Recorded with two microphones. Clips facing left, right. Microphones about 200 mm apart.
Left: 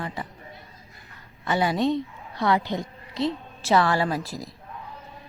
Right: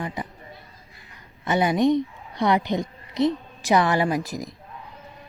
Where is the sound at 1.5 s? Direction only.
20° right (ahead or behind).